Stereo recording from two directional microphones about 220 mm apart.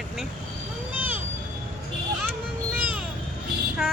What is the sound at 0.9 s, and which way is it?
Vehicle, 10° right (ahead or behind).